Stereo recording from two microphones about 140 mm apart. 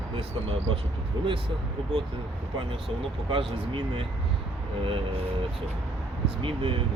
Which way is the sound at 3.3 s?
40° right (ahead or behind).